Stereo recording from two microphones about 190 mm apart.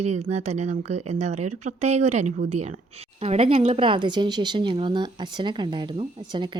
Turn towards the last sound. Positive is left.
turn(degrees=-25)  # may be behind; listen again after turning